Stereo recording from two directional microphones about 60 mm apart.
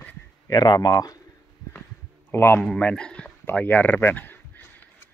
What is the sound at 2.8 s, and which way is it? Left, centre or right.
Speech, centre.